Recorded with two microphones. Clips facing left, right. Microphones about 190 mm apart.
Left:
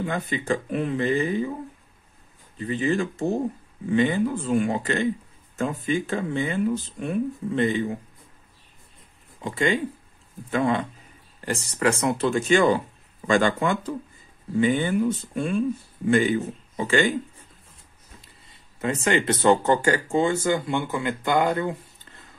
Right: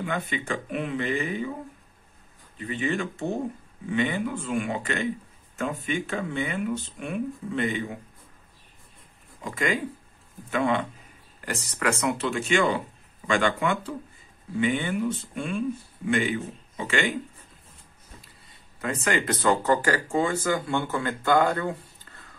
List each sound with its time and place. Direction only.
0.0 s speech: 35° left (ahead or behind)
2.5 s speech: 35° left (ahead or behind)
9.4 s speech: 30° left (ahead or behind)
18.8 s speech: 25° left (ahead or behind)